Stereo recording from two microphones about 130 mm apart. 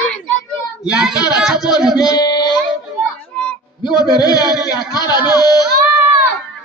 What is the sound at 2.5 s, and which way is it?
Child singing, 5° left (ahead or behind).